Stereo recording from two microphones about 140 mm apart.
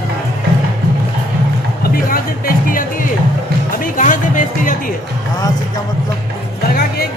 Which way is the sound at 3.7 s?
70° left (ahead or behind).